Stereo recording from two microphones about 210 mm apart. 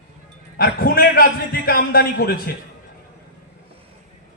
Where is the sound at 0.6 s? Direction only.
45° left (ahead or behind).